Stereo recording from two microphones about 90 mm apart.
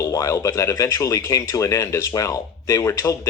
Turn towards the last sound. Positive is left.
turn(degrees=35)  # may be behind; listen again after turning